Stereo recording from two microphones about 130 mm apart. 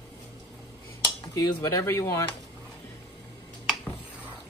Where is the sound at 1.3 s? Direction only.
25° left (ahead or behind).